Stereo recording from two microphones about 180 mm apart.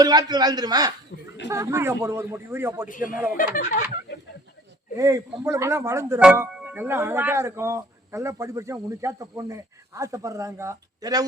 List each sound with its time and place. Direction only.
0.0 s a man's voice: 25° right (ahead or behind)
2.9 s speech: 50° left (ahead or behind)
4.9 s speech: 15° right (ahead or behind)